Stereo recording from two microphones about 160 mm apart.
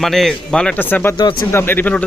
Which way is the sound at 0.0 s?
Centre (ahead or behind).